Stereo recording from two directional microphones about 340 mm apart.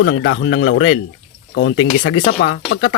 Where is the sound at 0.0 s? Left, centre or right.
Left.